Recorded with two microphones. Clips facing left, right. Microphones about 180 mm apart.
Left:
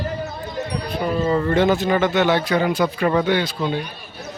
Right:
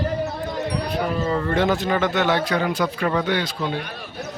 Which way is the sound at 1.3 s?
5° left (ahead or behind).